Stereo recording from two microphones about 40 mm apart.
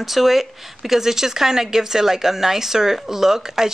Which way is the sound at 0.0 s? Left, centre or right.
Centre.